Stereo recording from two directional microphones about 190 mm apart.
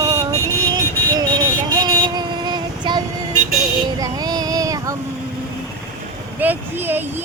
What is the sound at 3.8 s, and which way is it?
Child singing, 20° right (ahead or behind).